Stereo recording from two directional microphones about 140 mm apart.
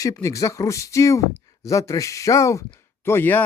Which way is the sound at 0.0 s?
25° left (ahead or behind).